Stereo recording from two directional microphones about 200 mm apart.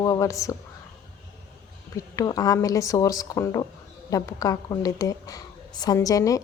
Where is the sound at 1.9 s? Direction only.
20° left (ahead or behind).